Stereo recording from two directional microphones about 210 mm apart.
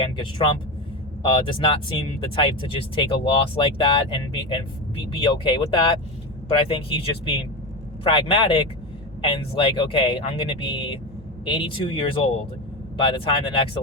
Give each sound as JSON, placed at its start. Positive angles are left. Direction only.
{"t": 0.0, "sound": "speech", "side_deg": 25}